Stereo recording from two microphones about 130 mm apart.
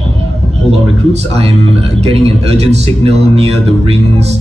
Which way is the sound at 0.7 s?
55° right (ahead or behind).